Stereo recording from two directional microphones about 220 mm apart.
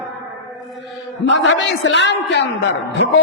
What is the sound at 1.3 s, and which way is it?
A man's voice, 55° left (ahead or behind).